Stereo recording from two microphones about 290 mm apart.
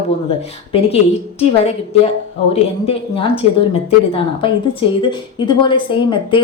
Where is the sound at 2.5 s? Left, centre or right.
Centre.